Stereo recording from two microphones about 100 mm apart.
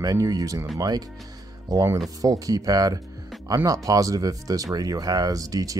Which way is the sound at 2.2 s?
35° right (ahead or behind).